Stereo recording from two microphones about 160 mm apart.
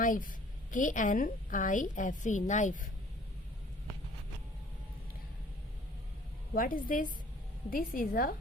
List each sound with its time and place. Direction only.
0.0 s a woman's voice: 55° left (ahead or behind)
6.5 s a woman's voice: 60° left (ahead or behind)